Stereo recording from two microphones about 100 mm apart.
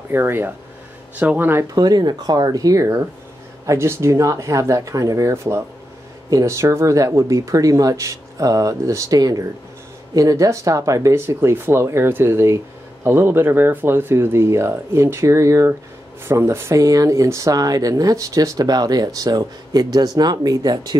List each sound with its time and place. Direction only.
0.1 s speech: 20° right (ahead or behind)
1.8 s speech: 45° right (ahead or behind)